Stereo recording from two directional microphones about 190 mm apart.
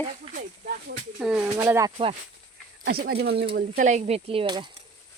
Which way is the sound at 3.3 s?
30° right (ahead or behind).